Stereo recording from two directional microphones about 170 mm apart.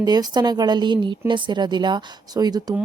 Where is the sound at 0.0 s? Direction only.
25° right (ahead or behind).